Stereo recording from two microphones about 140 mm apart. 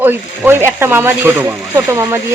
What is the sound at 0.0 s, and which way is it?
Speech, 15° right (ahead or behind).